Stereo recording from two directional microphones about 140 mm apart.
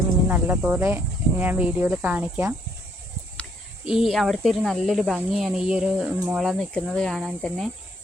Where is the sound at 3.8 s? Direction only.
5° right (ahead or behind).